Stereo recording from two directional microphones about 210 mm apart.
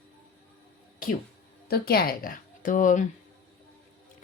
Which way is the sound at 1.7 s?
45° left (ahead or behind).